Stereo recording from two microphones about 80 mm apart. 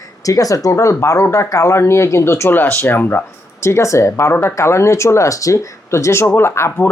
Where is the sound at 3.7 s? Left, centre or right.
Left.